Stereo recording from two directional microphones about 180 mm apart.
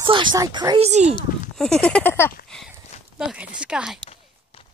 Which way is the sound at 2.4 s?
5° left (ahead or behind).